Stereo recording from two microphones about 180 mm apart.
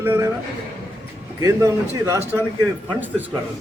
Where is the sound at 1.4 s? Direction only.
15° right (ahead or behind).